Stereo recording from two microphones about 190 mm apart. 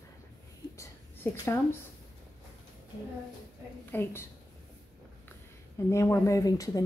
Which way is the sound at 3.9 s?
10° left (ahead or behind).